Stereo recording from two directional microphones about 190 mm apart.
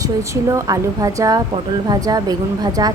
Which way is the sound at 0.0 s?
15° right (ahead or behind).